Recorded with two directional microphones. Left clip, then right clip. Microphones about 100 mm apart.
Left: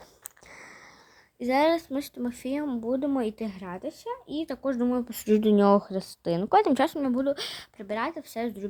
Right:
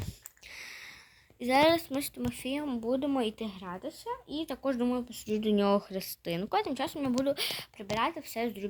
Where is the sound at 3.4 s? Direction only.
50° left (ahead or behind).